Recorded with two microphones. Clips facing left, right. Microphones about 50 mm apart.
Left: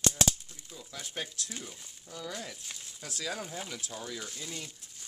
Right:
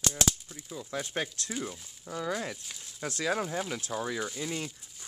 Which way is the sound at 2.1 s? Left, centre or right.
Right.